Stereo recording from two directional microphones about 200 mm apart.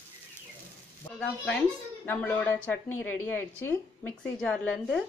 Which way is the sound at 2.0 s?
10° left (ahead or behind).